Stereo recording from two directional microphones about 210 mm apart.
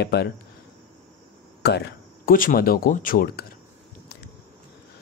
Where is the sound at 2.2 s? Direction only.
40° left (ahead or behind).